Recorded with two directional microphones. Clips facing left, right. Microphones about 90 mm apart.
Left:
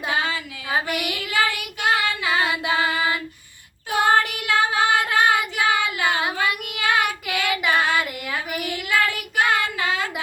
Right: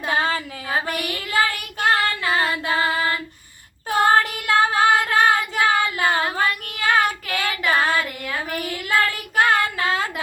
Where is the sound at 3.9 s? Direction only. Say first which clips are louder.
Right 2 dB; 40° right (ahead or behind).